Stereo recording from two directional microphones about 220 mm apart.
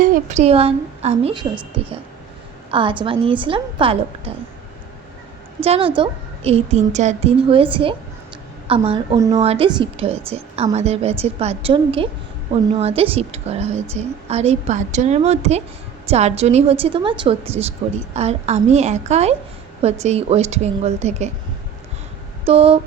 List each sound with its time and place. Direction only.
0.0 s a woman's voice: 30° right (ahead or behind)
5.6 s a woman's voice: 25° right (ahead or behind)
22.4 s a woman's voice: 25° right (ahead or behind)